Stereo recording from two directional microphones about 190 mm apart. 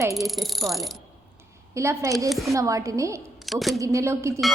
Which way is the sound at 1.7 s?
15° right (ahead or behind).